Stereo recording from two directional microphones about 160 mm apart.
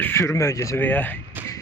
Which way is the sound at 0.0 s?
15° left (ahead or behind).